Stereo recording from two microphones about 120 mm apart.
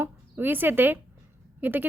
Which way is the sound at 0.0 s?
15° right (ahead or behind).